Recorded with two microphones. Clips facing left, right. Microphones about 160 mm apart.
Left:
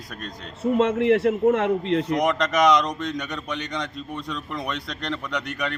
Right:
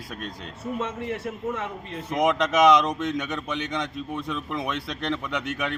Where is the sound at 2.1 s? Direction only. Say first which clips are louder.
Right 5 dB; 5° right (ahead or behind).